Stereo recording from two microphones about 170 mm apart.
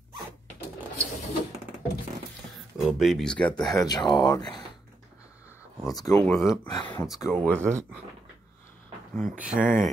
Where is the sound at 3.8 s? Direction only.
25° left (ahead or behind).